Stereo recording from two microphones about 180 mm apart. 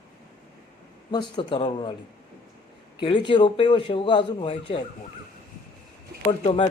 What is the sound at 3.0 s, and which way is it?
A man's voice, 30° left (ahead or behind).